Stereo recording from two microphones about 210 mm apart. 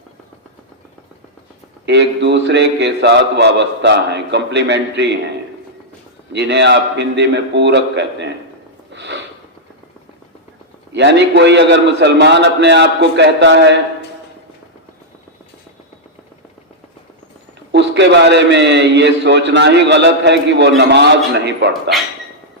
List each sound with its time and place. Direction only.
1.9 s a man's voice: 55° right (ahead or behind)
6.3 s a man's voice: 55° right (ahead or behind)
8.9 s a sound: 55° right (ahead or behind)
10.9 s a man's voice: 55° right (ahead or behind)
17.7 s a man's voice: 55° right (ahead or behind)